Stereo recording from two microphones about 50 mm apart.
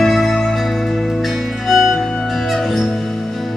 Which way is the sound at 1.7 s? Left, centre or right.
Centre.